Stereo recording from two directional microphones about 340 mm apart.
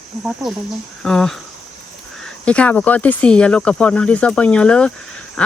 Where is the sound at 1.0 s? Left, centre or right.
Centre.